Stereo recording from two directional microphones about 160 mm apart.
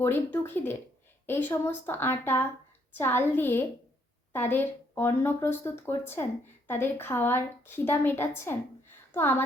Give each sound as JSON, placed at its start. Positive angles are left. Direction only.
{"t": 0.0, "sound": "speech", "side_deg": 15}